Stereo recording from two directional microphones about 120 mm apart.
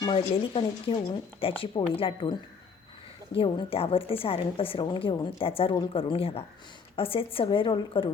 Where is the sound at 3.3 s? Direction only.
50° left (ahead or behind).